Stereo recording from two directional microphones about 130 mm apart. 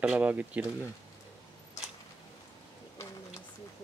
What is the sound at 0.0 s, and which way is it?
Speech, 10° right (ahead or behind).